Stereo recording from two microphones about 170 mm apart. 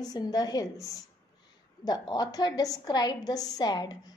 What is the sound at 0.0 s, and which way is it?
A woman's voice, 25° left (ahead or behind).